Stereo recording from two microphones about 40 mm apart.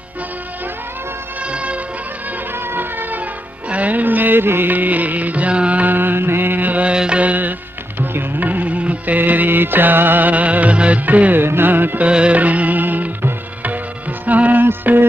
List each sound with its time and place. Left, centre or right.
1.5 s music: right
2.7 s a sound: right
3.7 s music: right
5.8 s mantra: right
6.7 s music: right
8.0 s music: right
8.5 s music: right
11.3 s music: right
12.1 s music: right
12.4 s music: right
14.2 s music: right
14.6 s music: right